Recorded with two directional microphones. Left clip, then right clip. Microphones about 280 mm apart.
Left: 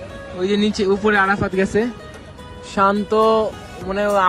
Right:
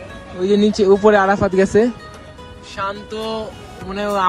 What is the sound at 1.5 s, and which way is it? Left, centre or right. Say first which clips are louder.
Speech: right 5 dB; left.